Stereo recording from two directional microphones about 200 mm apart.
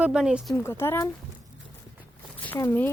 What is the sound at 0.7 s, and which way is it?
Speech, 10° left (ahead or behind).